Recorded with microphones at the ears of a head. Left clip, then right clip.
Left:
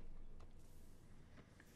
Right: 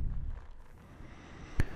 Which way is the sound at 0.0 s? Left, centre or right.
Right.